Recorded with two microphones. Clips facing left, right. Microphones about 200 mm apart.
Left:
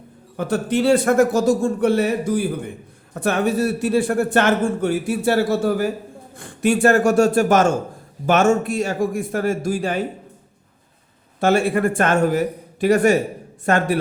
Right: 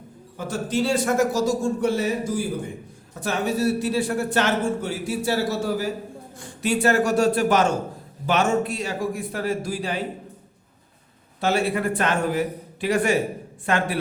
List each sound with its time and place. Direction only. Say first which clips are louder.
0.3 s a man's voice: left 5 dB; 60° left (ahead or behind)
11.3 s a man's voice: left 5 dB; 50° left (ahead or behind)